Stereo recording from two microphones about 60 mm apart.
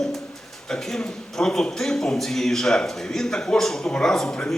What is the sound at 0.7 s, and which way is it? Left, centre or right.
A man's voice, centre.